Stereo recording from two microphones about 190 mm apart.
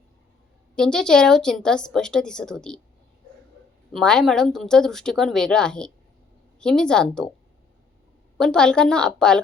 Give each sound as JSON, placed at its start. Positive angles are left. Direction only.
{"t": 0.8, "sound": "a woman's voice", "side_deg": 5}
{"t": 3.9, "sound": "a woman's voice", "side_deg": 5}
{"t": 8.4, "sound": "a woman's voice", "side_deg": 5}